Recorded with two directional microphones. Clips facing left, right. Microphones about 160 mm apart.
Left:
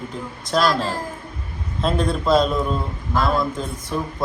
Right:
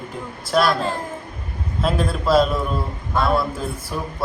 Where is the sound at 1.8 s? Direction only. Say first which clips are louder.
Left 1 dB; 5° right (ahead or behind).